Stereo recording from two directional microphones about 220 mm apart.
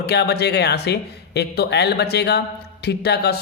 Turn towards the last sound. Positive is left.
turn(degrees=50)  # may be behind; listen again after turning